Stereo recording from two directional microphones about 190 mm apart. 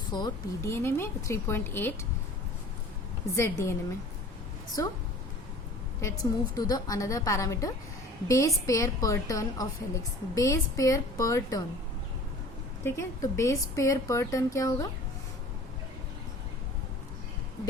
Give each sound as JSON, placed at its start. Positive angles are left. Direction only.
{"t": 0.1, "sound": "a woman's voice", "side_deg": 20}
{"t": 3.3, "sound": "a woman's voice", "side_deg": 15}
{"t": 4.8, "sound": "a woman's voice", "side_deg": 15}
{"t": 6.0, "sound": "a woman's voice", "side_deg": 15}
{"t": 12.8, "sound": "a woman's voice", "side_deg": 15}